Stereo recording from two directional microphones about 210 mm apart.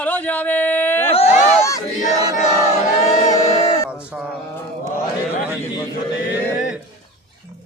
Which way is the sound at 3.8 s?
10° left (ahead or behind).